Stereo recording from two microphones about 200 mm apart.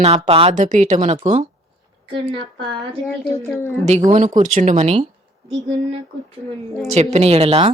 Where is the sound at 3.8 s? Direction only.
35° right (ahead or behind).